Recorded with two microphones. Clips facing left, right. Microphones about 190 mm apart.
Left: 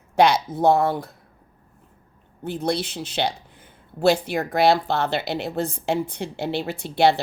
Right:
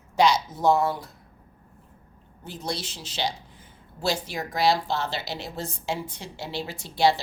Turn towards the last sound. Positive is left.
turn(degrees=60)  # may be behind; listen again after turning